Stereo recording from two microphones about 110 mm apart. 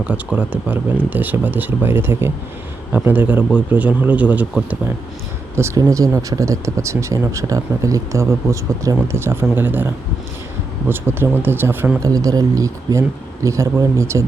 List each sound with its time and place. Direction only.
0.0 s a man's voice: 15° right (ahead or behind)
5.5 s speech: 25° right (ahead or behind)
11.9 s speech: 30° right (ahead or behind)